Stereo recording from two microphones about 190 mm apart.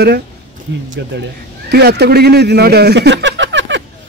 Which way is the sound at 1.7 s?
60° right (ahead or behind).